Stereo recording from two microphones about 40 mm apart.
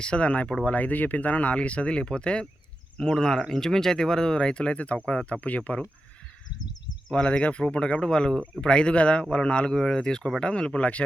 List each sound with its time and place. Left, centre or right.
0.0 s speech: left
7.1 s speech: left
9.7 s speech: centre; by 11.0 s left